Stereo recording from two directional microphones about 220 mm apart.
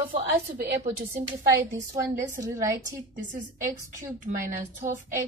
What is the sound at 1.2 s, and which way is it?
A woman's voice, 15° right (ahead or behind).